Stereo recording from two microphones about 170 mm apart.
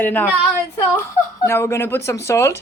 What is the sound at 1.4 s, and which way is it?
Speech, 15° left (ahead or behind).